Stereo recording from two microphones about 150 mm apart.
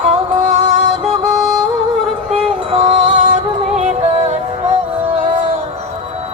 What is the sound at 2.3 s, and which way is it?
Music, 50° right (ahead or behind).